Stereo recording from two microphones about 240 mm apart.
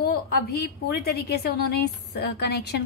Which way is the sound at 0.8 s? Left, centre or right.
Left.